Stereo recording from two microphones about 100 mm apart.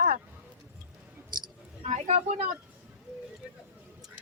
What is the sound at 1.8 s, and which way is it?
Speech, 90° right.